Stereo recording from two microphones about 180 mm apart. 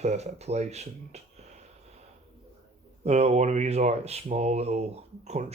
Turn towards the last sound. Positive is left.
turn(degrees=-35)  # may be behind; listen again after turning